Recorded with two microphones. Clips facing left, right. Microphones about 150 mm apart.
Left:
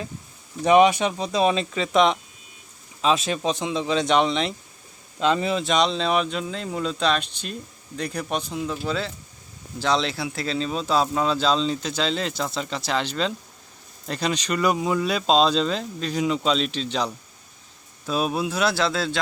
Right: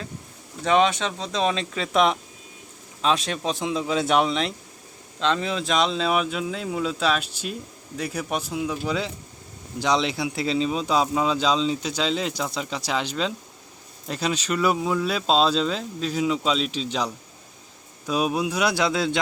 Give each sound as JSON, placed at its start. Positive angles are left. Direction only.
{"t": 0.6, "sound": "speech", "side_deg": 15}
{"t": 18.1, "sound": "speech", "side_deg": -10}